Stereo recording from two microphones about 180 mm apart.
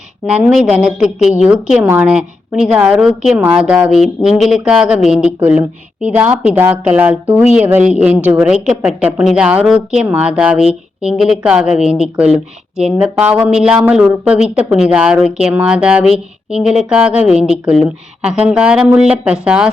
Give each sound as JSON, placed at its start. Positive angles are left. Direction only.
{"t": 0.3, "sound": "a woman's voice", "side_deg": -5}